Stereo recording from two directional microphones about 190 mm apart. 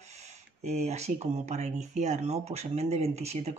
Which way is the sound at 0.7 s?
35° right (ahead or behind).